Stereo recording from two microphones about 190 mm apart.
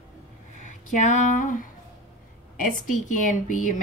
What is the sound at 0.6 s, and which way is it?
A woman's voice, 40° left (ahead or behind).